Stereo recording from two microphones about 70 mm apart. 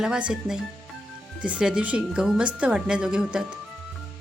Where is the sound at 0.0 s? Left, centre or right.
Centre.